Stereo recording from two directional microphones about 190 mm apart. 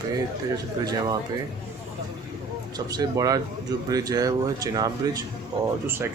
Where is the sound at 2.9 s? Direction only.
20° right (ahead or behind).